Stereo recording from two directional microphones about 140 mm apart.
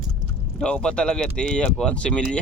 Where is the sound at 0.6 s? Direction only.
5° left (ahead or behind).